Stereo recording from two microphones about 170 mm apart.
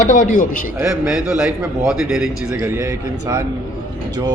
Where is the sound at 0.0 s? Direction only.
45° left (ahead or behind).